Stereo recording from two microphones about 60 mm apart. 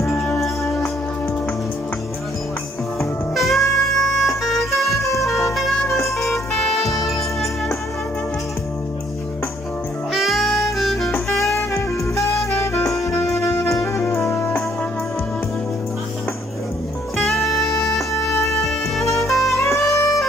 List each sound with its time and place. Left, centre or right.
3.3 s music: centre
6.0 s music: centre
10.1 s saxophone: centre
11.2 s music: centre
11.5 s saxophone: left
13.0 s music: left
17.2 s music: centre
19.2 s saxophone: centre
19.5 s music: left
19.8 s music: centre